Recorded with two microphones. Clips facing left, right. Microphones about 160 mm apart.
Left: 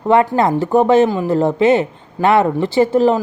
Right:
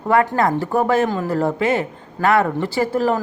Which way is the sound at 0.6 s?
25° left (ahead or behind).